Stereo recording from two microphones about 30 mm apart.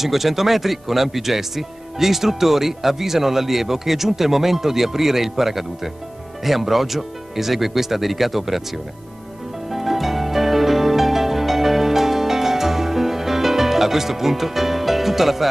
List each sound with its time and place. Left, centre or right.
0.0 s speech: centre
9.7 s music: centre